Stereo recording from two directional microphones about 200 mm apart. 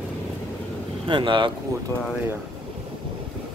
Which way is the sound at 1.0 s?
25° right (ahead or behind).